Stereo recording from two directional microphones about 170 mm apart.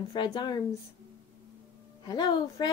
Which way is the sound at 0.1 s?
25° left (ahead or behind).